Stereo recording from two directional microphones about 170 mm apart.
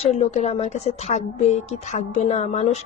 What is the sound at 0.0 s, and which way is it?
A woman's voice, 40° left (ahead or behind).